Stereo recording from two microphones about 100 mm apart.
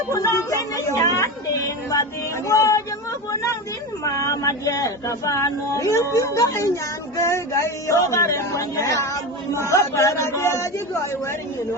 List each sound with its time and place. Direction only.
0.1 s speech: 30° left (ahead or behind)
4.0 s speech: 35° left (ahead or behind)